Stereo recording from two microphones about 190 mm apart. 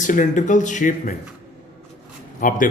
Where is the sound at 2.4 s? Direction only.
45° left (ahead or behind).